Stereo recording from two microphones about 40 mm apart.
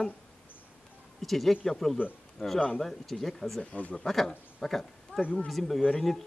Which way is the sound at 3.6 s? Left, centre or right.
Left.